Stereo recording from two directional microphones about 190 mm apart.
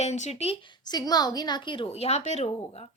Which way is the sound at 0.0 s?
35° left (ahead or behind).